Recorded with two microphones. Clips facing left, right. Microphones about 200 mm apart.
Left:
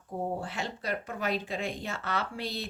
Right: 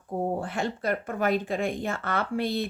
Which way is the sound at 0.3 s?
50° right (ahead or behind).